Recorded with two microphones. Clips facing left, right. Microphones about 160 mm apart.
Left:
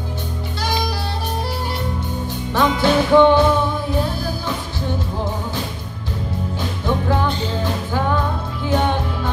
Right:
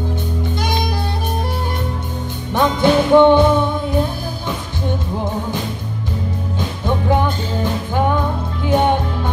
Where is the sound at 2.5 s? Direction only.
15° right (ahead or behind).